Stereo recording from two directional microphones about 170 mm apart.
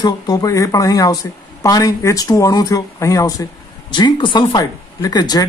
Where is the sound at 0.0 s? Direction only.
20° left (ahead or behind).